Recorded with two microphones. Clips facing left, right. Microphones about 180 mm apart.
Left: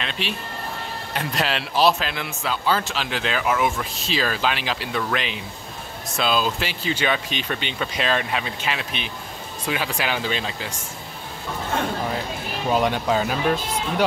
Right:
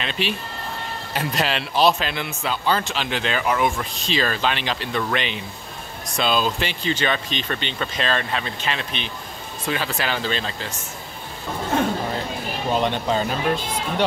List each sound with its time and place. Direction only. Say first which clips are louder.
0.0 s a man's voice: right 3 dB; centre (ahead or behind)
12.7 s a man's voice: left 1 dB; 5° left (ahead or behind)